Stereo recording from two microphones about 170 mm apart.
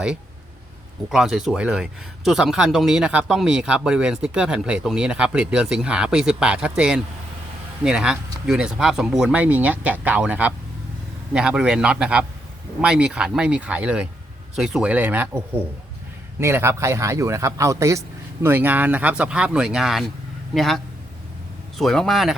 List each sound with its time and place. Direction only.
1.1 s a man's voice: 5° right (ahead or behind)
16.4 s a man's voice: 15° right (ahead or behind)